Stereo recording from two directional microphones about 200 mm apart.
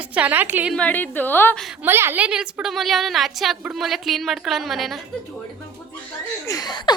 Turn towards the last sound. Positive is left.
turn(degrees=20)  # may be behind; listen again after turning